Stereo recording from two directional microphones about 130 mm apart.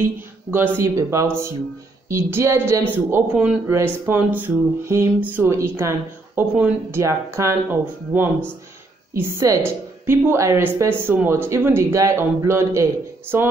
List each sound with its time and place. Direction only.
0.0 s speech: 15° right (ahead or behind)
8.1 s speech: 10° right (ahead or behind)